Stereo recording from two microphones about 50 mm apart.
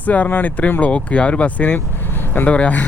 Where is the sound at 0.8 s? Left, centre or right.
Left.